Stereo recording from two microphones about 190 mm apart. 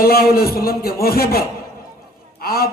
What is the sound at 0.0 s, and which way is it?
A man's voice, 50° left (ahead or behind).